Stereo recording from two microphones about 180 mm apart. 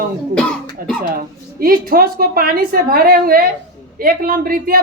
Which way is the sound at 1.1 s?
55° right (ahead or behind).